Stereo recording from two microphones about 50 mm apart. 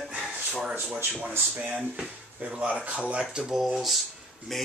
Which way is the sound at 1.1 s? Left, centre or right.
Right.